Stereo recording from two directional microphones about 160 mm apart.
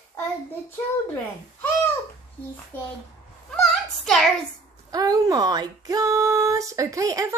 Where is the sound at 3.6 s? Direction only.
Centre (ahead or behind).